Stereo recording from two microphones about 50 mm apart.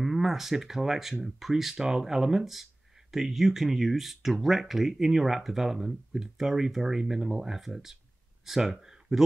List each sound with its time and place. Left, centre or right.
0.0 s speech: centre